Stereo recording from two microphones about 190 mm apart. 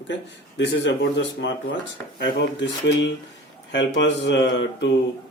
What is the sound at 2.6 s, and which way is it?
Speech, 65° left (ahead or behind).